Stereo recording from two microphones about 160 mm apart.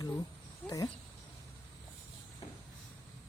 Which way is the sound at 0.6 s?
5° left (ahead or behind).